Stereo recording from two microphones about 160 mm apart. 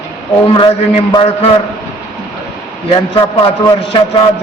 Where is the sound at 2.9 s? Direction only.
30° left (ahead or behind).